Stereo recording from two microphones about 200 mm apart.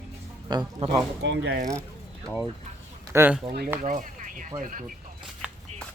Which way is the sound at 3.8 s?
40° right (ahead or behind).